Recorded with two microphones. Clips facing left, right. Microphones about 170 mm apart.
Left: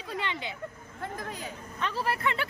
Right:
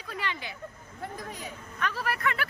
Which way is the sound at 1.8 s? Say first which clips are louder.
Left 1 dB; 25° left (ahead or behind).